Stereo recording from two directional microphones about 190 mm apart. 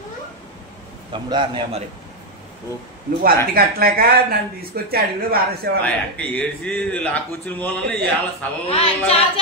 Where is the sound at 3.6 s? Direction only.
50° right (ahead or behind).